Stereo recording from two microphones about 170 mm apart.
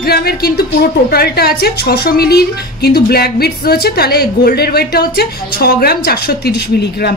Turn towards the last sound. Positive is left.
turn(degrees=75)  # may be behind; listen again after turning